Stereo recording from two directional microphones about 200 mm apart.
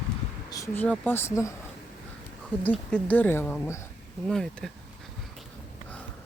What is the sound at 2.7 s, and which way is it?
Speech, 5° left (ahead or behind).